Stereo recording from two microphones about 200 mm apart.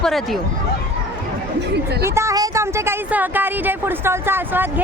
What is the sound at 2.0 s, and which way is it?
A woman's voice, 15° right (ahead or behind).